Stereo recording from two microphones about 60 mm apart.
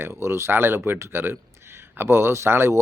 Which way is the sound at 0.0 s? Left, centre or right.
Right.